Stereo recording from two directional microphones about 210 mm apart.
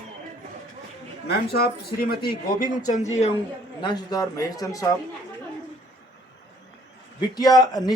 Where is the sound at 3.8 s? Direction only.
20° left (ahead or behind).